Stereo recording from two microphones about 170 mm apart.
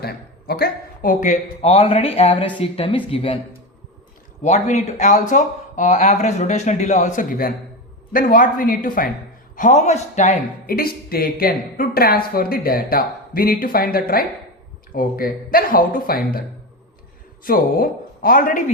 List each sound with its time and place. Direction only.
0.0 s speech: 65° left (ahead or behind); by 3.3 s 30° left (ahead or behind)
4.4 s speech: 45° left (ahead or behind)
10.7 s speech: 60° left (ahead or behind)
17.4 s a woman's voice: 60° left (ahead or behind)